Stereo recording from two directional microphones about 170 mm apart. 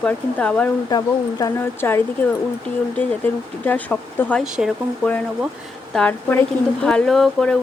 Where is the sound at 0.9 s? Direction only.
25° left (ahead or behind).